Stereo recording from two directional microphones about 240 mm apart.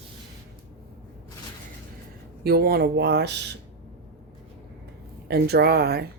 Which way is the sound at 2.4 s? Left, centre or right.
Right.